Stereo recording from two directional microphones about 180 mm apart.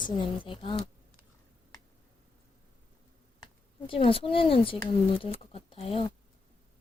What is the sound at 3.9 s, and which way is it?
Speech, 30° left (ahead or behind).